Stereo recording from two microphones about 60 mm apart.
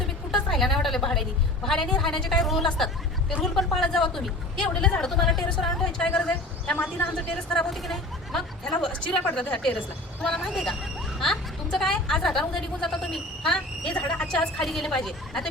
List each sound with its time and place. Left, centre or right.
0.5 s a woman's voice: centre
8.9 s a woman's voice: centre
14.3 s a woman's voice: centre